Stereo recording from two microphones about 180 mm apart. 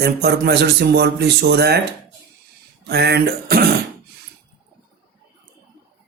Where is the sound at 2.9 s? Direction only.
65° right (ahead or behind).